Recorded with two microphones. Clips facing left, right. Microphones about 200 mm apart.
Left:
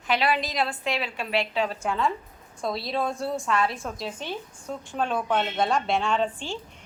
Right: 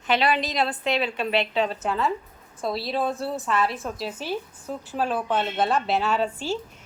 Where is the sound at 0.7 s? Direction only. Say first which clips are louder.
Right 4 dB; 25° right (ahead or behind).